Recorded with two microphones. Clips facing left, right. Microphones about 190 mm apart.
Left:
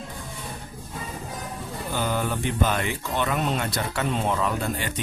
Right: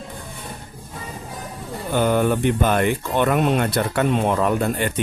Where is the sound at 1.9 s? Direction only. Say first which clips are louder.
Right 9 dB; 55° right (ahead or behind).